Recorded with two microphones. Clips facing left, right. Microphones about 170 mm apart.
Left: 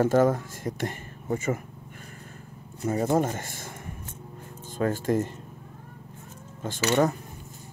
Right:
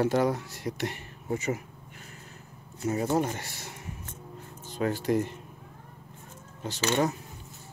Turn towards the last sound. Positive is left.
turn(degrees=50)  # may be behind; listen again after turning